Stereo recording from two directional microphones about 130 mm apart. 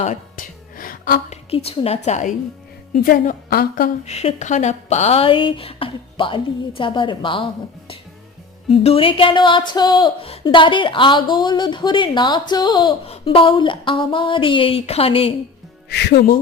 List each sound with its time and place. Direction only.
0.0 s music: 75° left (ahead or behind)
1.5 s speech: 45° left (ahead or behind); by 2.3 s 65° left (ahead or behind)
2.9 s a woman's voice: 90° left
4.0 s a woman's voice: 50° left (ahead or behind)